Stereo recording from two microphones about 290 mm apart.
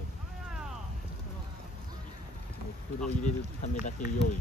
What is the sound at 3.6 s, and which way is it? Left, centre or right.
Speech, left.